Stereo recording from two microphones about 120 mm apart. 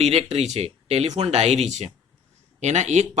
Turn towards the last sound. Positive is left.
turn(degrees=-75)  # may be behind; listen again after turning